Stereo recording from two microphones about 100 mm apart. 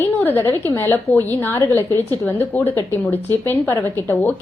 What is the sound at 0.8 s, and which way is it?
A woman's voice, 20° left (ahead or behind).